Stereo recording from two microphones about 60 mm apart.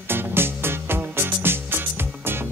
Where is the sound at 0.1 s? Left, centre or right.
Right.